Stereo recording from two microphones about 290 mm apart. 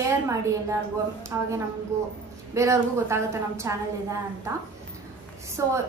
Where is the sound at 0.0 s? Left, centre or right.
Centre.